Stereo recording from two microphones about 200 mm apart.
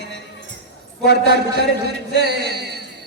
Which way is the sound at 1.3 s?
55° right (ahead or behind).